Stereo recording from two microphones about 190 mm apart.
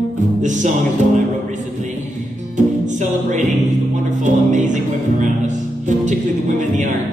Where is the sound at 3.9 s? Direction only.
40° right (ahead or behind).